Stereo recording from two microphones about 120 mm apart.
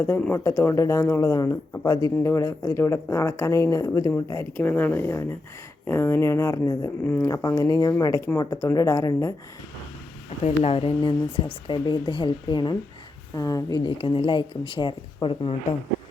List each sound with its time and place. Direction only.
0.3 s speech: 25° left (ahead or behind)
4.6 s speech: 15° left (ahead or behind)
7.0 s speech: 15° left (ahead or behind)
7.4 s speech: 30° left (ahead or behind)
10.4 s speech: 55° left (ahead or behind); by 13.9 s 35° left (ahead or behind)
14.0 s speech: 45° left (ahead or behind)